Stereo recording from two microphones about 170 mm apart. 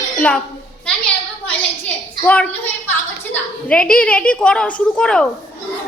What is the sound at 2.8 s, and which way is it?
A woman's voice, 10° left (ahead or behind).